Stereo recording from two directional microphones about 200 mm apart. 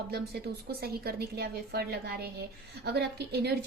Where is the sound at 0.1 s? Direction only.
50° right (ahead or behind).